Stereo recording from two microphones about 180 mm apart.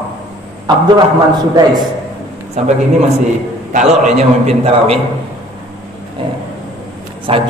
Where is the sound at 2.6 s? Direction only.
35° right (ahead or behind).